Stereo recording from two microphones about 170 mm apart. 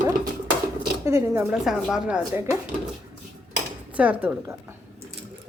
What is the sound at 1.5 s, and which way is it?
Speech, 5° right (ahead or behind).